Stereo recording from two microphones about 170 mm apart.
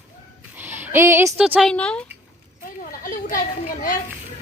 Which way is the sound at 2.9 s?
50° left (ahead or behind).